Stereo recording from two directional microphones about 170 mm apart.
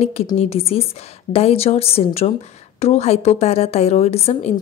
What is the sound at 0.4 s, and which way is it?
A woman's voice, 35° left (ahead or behind).